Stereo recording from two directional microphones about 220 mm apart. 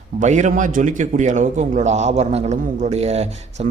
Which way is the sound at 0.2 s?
35° right (ahead or behind).